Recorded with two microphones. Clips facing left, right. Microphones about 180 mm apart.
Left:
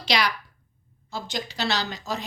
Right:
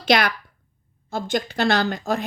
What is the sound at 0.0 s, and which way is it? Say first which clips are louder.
A woman's voice: right 6 dB; 55° right (ahead or behind).